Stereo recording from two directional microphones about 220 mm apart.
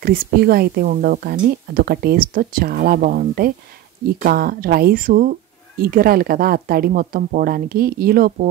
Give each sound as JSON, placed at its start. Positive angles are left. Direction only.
{"t": 0.0, "sound": "speech", "side_deg": -45}